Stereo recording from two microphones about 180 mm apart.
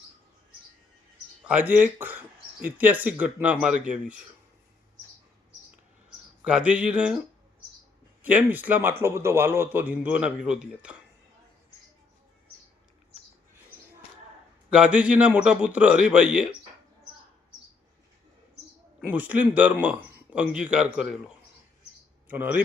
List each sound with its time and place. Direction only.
1.5 s speech: 10° right (ahead or behind)
6.4 s speech: 5° right (ahead or behind)
8.2 s speech: 10° right (ahead or behind)
14.7 s speech: 5° right (ahead or behind)
19.0 s speech: 10° right (ahead or behind)